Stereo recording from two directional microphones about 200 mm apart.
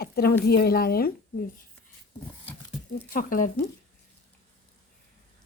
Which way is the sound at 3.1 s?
45° left (ahead or behind).